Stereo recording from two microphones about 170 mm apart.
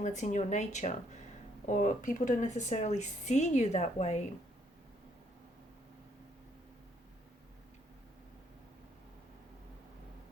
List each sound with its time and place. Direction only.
0.0 s speech: 45° left (ahead or behind)